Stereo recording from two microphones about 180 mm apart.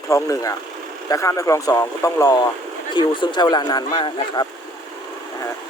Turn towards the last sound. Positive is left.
turn(degrees=25)  # may be behind; listen again after turning